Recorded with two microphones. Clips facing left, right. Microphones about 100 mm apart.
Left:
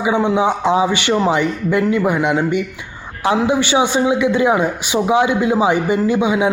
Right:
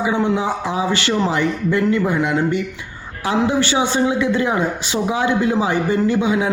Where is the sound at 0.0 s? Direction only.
20° left (ahead or behind).